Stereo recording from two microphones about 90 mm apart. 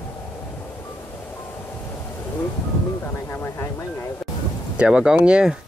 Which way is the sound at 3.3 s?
25° left (ahead or behind).